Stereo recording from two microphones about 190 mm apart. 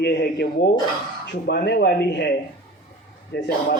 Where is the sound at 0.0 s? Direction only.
60° left (ahead or behind).